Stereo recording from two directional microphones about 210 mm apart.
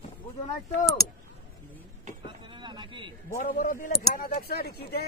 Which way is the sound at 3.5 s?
40° left (ahead or behind).